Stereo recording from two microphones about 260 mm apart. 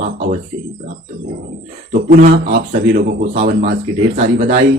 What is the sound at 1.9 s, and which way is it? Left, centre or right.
Speech, right.